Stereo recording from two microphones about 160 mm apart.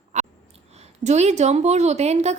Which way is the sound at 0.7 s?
45° right (ahead or behind).